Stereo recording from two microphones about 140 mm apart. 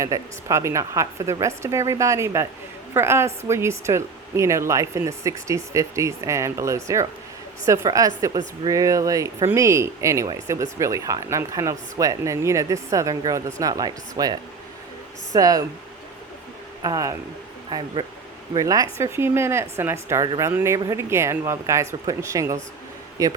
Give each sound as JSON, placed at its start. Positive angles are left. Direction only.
{"t": 0.0, "sound": "speech", "side_deg": -20}
{"t": 16.8, "sound": "speech", "side_deg": -25}